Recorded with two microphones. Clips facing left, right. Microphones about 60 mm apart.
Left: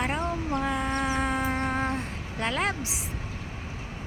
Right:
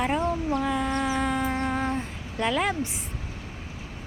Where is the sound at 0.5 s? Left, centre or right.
Centre.